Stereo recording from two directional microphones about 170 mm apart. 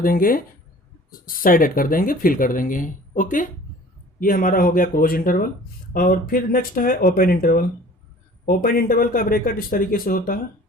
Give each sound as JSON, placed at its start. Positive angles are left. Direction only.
{"t": 0.0, "sound": "speech", "side_deg": 55}